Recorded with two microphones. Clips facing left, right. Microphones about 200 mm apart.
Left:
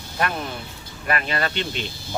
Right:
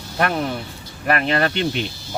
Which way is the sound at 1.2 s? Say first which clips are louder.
Right 6 dB; 55° right (ahead or behind).